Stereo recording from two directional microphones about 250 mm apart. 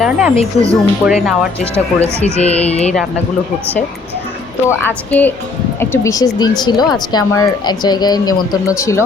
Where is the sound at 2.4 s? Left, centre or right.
Left.